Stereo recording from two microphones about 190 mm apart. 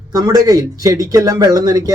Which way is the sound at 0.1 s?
20° right (ahead or behind).